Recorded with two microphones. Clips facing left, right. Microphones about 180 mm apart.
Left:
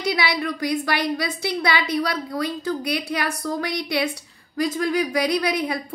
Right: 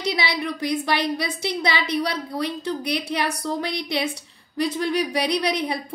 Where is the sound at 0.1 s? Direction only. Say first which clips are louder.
Left 3 dB; 20° right (ahead or behind).